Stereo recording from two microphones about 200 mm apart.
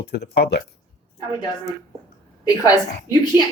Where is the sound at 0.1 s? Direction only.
55° left (ahead or behind).